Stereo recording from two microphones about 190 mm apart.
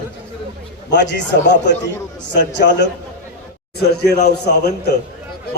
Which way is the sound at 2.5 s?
65° left (ahead or behind).